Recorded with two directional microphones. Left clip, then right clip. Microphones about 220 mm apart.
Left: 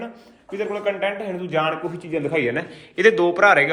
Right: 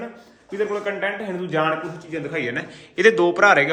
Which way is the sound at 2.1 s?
20° left (ahead or behind).